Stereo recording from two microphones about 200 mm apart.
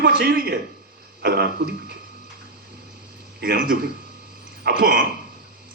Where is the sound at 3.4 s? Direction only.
55° right (ahead or behind).